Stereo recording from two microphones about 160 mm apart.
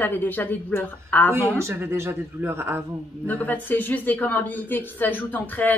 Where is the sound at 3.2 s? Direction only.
10° left (ahead or behind).